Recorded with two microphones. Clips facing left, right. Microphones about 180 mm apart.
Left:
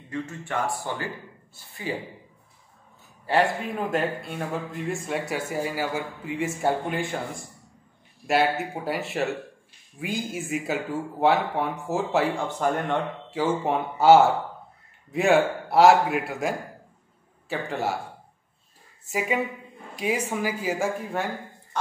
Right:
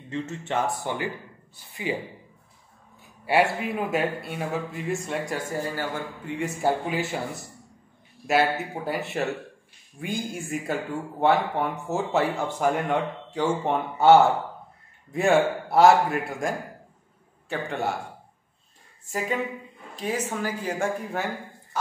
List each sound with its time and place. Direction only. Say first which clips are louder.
0.1 s a man's voice: right 2 dB; 25° right (ahead or behind)
3.3 s a man's voice: right 1 dB; 10° right (ahead or behind)
13.3 s a man's voice: even; 5° left (ahead or behind)
19.0 s speech: left 2 dB; 10° left (ahead or behind)